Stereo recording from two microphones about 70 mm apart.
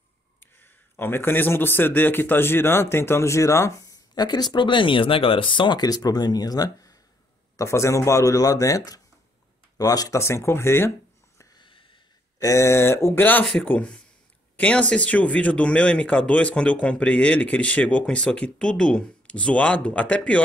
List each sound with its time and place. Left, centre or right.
0.4 s speech: left
4.1 s speech: left
5.7 s speech: left
7.5 s speech: left
10.2 s speech: left
12.4 s speech: left
13.2 s speech: left
13.7 s a man's voice: centre